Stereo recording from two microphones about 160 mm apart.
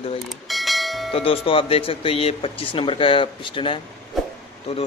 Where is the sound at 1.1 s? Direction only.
35° left (ahead or behind).